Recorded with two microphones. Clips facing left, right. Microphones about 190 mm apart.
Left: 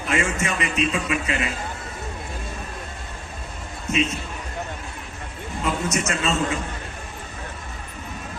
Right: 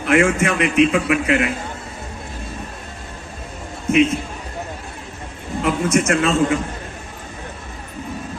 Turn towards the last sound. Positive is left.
turn(degrees=-55)  # may be behind; listen again after turning